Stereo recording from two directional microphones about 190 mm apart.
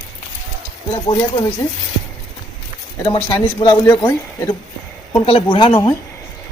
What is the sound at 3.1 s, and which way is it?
Speech, 25° left (ahead or behind).